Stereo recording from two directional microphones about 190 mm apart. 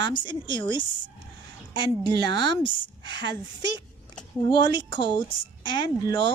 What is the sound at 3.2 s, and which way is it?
Speech, 65° right (ahead or behind).